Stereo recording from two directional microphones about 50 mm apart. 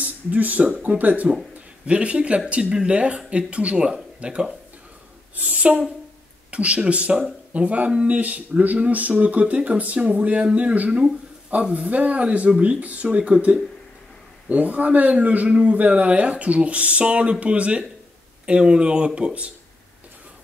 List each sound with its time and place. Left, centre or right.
0.0 s a man's voice: right
5.3 s a woman's voice: right
7.5 s a man's voice: right